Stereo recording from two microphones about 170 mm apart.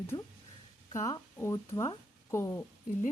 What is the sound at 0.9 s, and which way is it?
Speech, 20° left (ahead or behind).